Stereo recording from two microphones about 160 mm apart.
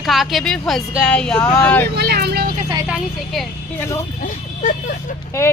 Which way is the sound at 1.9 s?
85° right.